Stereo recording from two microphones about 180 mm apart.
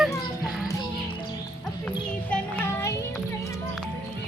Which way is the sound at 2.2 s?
10° left (ahead or behind).